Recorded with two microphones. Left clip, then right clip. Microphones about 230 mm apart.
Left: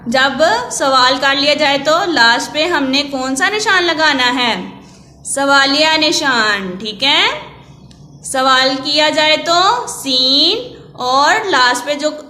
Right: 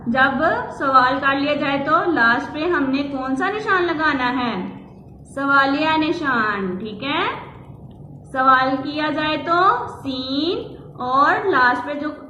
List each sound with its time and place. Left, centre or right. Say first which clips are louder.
0.1 s a woman's voice: left 5 dB; left
8.3 s a woman's voice: left 4 dB; left